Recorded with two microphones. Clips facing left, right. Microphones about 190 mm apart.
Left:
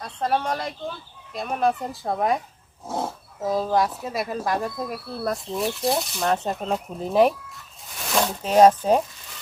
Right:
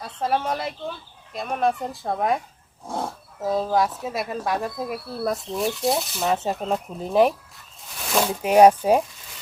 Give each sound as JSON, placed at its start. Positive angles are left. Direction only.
{"t": 0.0, "sound": "speech", "side_deg": -5}
{"t": 7.9, "sound": "a sound", "side_deg": 0}
{"t": 8.3, "sound": "speech", "side_deg": -10}